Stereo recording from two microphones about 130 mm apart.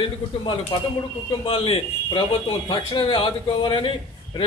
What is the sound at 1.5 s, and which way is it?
A man's voice, 45° left (ahead or behind).